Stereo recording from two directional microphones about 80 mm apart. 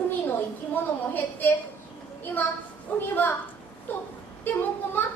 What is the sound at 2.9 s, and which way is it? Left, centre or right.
Speech, left.